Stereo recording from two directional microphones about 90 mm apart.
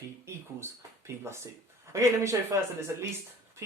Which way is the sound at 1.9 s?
35° right (ahead or behind).